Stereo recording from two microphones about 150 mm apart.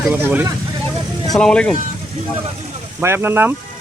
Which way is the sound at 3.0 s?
15° right (ahead or behind).